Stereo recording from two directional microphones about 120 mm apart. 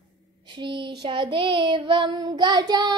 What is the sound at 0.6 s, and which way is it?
Child singing, 45° right (ahead or behind).